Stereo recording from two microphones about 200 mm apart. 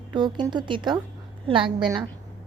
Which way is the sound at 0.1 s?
20° right (ahead or behind).